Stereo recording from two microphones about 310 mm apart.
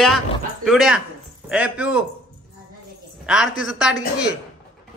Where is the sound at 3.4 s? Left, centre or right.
Left.